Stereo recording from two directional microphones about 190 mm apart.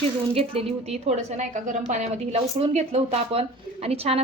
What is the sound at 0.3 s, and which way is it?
A woman's voice, 30° right (ahead or behind).